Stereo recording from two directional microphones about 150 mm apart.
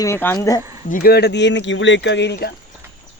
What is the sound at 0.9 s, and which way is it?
Speech, 70° left (ahead or behind).